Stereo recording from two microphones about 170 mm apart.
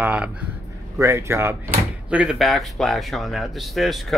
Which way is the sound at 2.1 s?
5° right (ahead or behind).